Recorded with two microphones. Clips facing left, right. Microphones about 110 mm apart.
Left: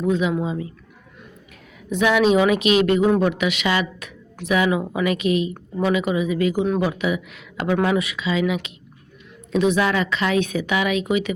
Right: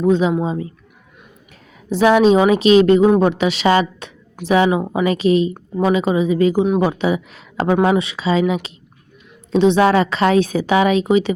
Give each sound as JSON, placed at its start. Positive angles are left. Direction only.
{"t": 0.0, "sound": "speech", "side_deg": -30}
{"t": 1.9, "sound": "speech", "side_deg": -35}